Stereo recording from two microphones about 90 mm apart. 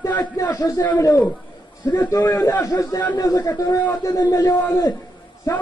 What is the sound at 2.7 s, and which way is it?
A man's voice, 40° left (ahead or behind).